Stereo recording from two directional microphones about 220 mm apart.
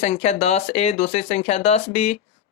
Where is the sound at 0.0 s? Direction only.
30° left (ahead or behind).